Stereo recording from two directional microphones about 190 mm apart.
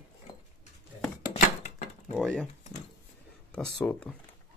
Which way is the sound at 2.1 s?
5° left (ahead or behind).